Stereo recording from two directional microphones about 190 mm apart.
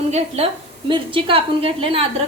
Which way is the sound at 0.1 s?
30° right (ahead or behind).